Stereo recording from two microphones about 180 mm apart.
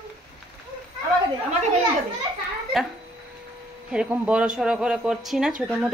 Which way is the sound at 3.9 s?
5° right (ahead or behind).